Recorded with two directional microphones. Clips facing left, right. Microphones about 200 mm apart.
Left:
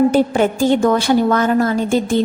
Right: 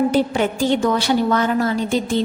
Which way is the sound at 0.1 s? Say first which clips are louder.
Left 4 dB; 45° left (ahead or behind).